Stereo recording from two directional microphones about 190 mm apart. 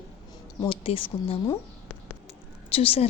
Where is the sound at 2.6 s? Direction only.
30° left (ahead or behind).